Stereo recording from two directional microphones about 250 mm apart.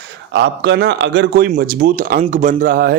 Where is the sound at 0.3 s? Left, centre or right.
Right.